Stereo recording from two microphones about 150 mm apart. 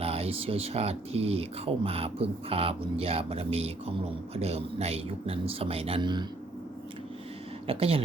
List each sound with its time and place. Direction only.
0.0 s speech: 40° right (ahead or behind)
7.7 s speech: 40° right (ahead or behind)